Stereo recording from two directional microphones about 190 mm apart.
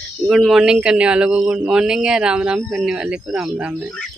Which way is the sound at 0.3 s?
Centre (ahead or behind).